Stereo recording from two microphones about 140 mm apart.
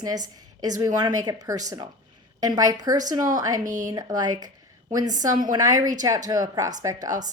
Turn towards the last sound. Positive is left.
turn(degrees=-25)  # may be behind; listen again after turning